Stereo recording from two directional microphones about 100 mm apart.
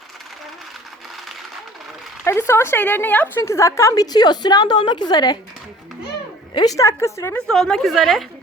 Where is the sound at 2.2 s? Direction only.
25° left (ahead or behind); by 5.4 s 45° left (ahead or behind).